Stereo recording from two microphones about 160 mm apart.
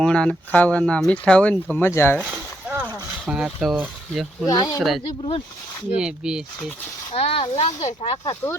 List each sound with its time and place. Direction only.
0.0 s speech: 5° left (ahead or behind)
2.2 s a sound: 10° right (ahead or behind)
2.9 s speech: 5° right (ahead or behind)
4.4 s speech: 25° left (ahead or behind)
4.8 s speech: centre (ahead or behind)
5.0 s speech: 35° left (ahead or behind)
6.0 s speech: 5° right (ahead or behind)
7.1 s speech: 40° left (ahead or behind)